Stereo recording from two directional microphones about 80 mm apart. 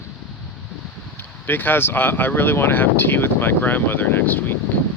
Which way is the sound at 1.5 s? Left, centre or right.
Left.